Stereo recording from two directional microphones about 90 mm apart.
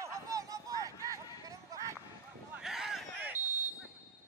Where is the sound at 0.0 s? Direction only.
40° right (ahead or behind).